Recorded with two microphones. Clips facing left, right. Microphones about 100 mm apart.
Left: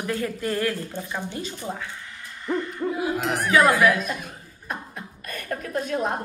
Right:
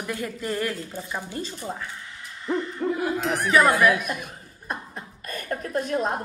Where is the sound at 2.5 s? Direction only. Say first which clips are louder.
Right 1 dB; centre (ahead or behind).